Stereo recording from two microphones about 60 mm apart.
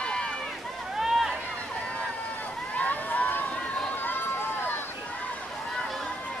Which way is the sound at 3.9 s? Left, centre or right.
Left.